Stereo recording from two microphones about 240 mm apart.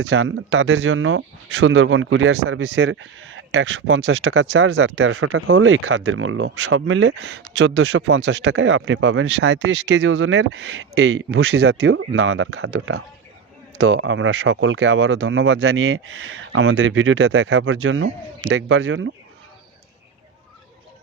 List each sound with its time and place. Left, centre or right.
0.0 s speech: right
11.7 s speech: right
11.9 s speech: right